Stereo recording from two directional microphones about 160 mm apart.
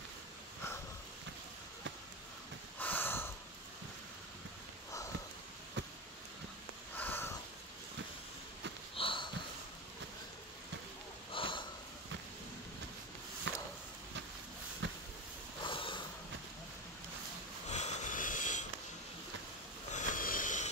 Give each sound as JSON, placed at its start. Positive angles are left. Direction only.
{"t": 2.8, "sound": "snort", "side_deg": 10}
{"t": 7.0, "sound": "sniff", "side_deg": 15}
{"t": 8.9, "sound": "sniff", "side_deg": 30}
{"t": 11.3, "sound": "sniff", "side_deg": 30}
{"t": 14.8, "sound": "a sound", "side_deg": -90}
{"t": 15.6, "sound": "sniff", "side_deg": 30}
{"t": 17.6, "sound": "wheeze", "side_deg": 45}
{"t": 19.9, "sound": "a sound", "side_deg": 50}